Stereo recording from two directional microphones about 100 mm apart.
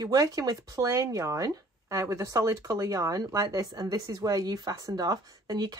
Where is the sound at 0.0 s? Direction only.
35° right (ahead or behind).